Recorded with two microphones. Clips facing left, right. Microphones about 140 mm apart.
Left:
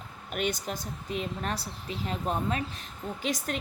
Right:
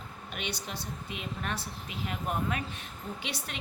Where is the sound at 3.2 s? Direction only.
45° left (ahead or behind).